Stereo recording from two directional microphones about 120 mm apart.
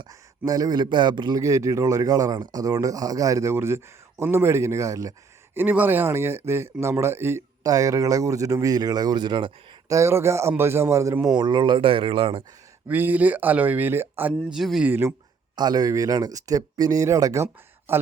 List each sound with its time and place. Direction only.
0.1 s speech: 30° right (ahead or behind)
1.4 s speech: 30° right (ahead or behind)
5.5 s speech: 15° right (ahead or behind); by 9.5 s 40° right (ahead or behind)
9.9 s speech: 25° right (ahead or behind)
11.3 s speech: 40° right (ahead or behind)
12.9 s speech: 15° right (ahead or behind)
14.5 s speech: centre (ahead or behind)
14.8 s speech: 20° right (ahead or behind)
15.5 s speech: 35° right (ahead or behind)